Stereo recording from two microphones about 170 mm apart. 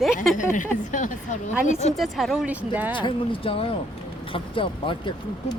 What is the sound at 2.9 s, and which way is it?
Speech, 30° left (ahead or behind).